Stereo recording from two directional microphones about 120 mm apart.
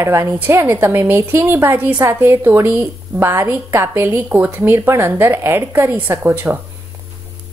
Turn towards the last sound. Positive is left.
turn(degrees=-25)  # may be behind; listen again after turning